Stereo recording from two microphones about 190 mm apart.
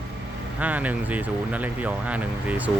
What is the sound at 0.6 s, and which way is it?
Speech, 10° right (ahead or behind).